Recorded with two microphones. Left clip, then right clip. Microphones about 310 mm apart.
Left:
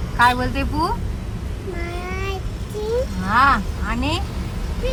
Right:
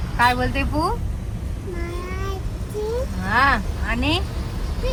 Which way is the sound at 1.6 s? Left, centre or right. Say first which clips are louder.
Left 2 dB; centre.